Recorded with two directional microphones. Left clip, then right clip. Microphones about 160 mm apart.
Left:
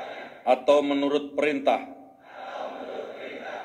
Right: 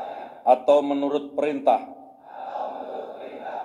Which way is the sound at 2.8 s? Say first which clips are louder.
Right 1 dB; 15° left (ahead or behind).